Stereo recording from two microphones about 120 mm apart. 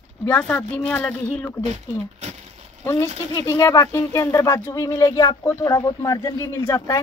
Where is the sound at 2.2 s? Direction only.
75° right (ahead or behind).